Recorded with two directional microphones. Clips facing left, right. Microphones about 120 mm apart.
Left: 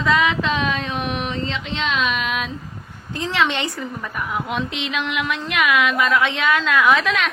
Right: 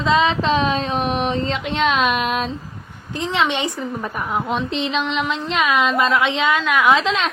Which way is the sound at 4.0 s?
30° right (ahead or behind).